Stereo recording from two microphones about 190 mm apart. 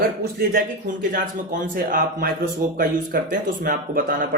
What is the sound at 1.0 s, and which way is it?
A man's voice, 45° right (ahead or behind).